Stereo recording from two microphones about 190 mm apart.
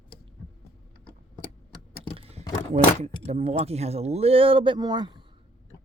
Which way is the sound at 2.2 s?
30° right (ahead or behind).